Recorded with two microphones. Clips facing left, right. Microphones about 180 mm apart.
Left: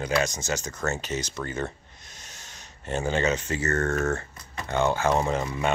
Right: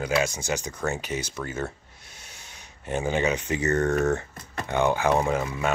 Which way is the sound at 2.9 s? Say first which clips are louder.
Even; 15° right (ahead or behind).